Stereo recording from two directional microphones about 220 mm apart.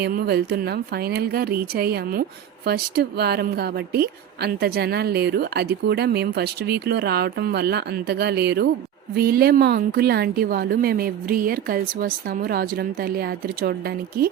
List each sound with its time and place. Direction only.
0.0 s a woman's voice: 45° right (ahead or behind)